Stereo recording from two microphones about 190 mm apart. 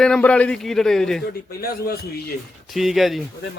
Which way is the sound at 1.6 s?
55° left (ahead or behind).